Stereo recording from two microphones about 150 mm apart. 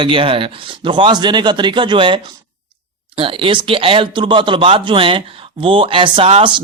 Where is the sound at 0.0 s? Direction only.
35° right (ahead or behind).